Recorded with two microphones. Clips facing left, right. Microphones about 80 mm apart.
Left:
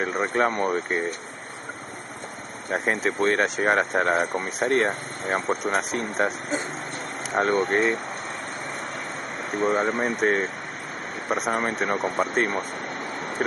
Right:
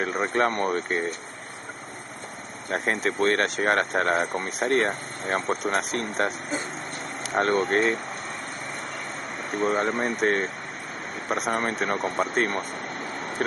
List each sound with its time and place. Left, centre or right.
0.0 s speech: centre
2.7 s speech: centre
9.5 s speech: centre